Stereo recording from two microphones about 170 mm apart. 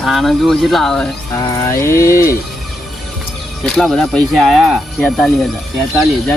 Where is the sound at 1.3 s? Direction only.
20° left (ahead or behind).